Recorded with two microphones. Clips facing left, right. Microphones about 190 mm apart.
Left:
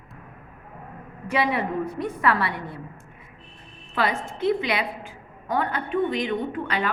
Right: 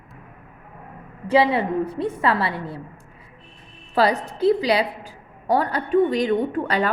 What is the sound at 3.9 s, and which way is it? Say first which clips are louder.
A woman's voice: right 6 dB; 35° right (ahead or behind).